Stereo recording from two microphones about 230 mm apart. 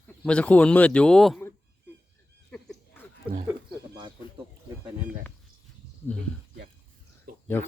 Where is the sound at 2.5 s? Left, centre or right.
Centre.